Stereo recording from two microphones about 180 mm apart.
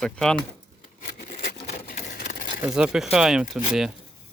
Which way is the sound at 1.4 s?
55° left (ahead or behind).